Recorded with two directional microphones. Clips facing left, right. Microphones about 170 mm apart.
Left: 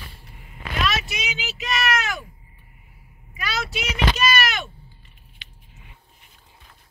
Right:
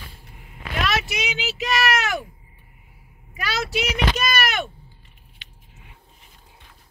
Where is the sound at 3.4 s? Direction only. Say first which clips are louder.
Right 3 dB; 70° right (ahead or behind).